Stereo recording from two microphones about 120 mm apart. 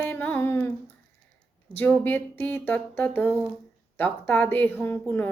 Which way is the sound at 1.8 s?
15° left (ahead or behind).